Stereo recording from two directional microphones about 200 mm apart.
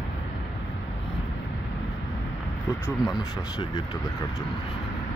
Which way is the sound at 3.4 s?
20° left (ahead or behind).